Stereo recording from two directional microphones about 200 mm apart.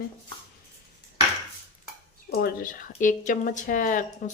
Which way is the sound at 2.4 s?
45° left (ahead or behind).